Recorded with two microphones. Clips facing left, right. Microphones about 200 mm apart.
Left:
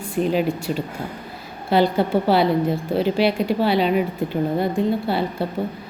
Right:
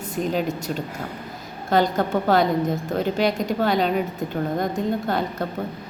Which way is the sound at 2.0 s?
10° left (ahead or behind).